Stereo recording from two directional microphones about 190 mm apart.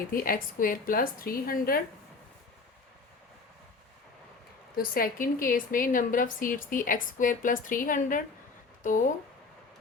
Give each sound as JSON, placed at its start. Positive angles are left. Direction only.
{"t": 0.1, "sound": "a woman's voice", "side_deg": 50}
{"t": 4.7, "sound": "a woman's voice", "side_deg": 50}